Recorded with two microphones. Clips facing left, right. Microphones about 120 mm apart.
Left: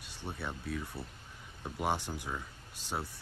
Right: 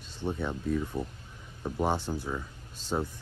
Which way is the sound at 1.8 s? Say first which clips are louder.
Right 3 dB; 15° left (ahead or behind).